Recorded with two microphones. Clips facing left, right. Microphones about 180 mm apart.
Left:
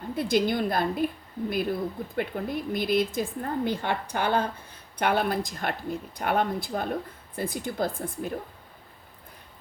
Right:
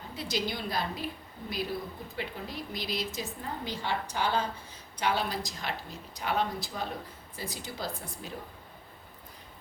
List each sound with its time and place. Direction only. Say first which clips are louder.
0.2 s a woman's voice: left 9 dB; 55° left (ahead or behind)